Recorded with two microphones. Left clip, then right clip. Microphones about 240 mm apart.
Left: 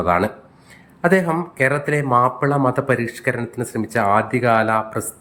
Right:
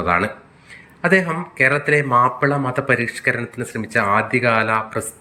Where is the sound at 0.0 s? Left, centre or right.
Centre.